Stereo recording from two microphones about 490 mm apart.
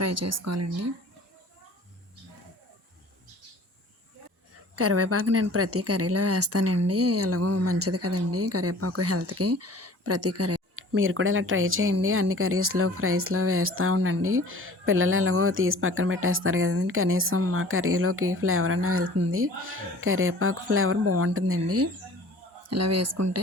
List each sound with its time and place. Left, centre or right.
0.0 s speech: right
4.7 s speech: right